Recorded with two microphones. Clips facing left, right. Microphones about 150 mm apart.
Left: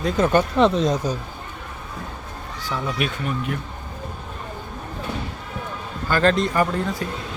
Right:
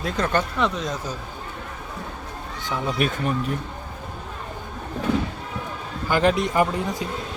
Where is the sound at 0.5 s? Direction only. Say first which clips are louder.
Left 7 dB; 30° left (ahead or behind).